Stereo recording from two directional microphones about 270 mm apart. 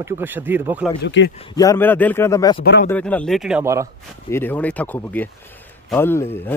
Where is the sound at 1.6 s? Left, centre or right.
Centre.